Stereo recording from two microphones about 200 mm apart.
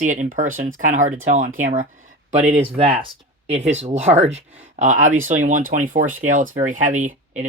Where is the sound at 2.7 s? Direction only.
25° right (ahead or behind).